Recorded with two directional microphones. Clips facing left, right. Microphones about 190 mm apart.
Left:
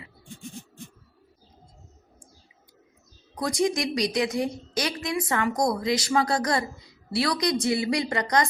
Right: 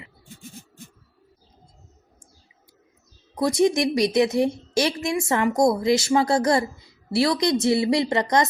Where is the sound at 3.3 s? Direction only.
25° right (ahead or behind).